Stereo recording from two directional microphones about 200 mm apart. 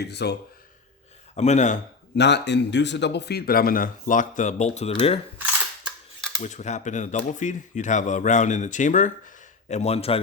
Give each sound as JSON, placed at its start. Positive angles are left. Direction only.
{"t": 0.0, "sound": "speech", "side_deg": 55}
{"t": 1.4, "sound": "speech", "side_deg": 35}
{"t": 2.1, "sound": "a man's voice", "side_deg": 60}
{"t": 5.8, "sound": "a sound", "side_deg": 5}
{"t": 6.4, "sound": "speech", "side_deg": 35}